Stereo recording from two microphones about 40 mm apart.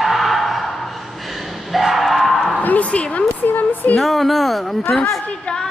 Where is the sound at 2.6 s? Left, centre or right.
Left.